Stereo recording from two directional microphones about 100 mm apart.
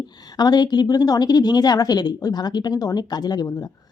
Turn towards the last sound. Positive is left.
turn(degrees=40)  # may be behind; listen again after turning